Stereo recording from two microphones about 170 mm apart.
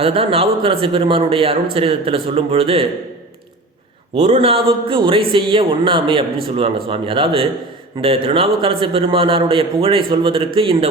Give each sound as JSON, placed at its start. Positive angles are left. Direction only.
{"t": 0.0, "sound": "a man's voice", "side_deg": -35}
{"t": 4.1, "sound": "a man's voice", "side_deg": -35}